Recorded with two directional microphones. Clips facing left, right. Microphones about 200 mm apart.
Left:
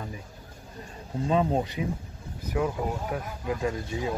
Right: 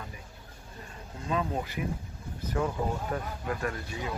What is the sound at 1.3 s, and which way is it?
Speech, 30° left (ahead or behind).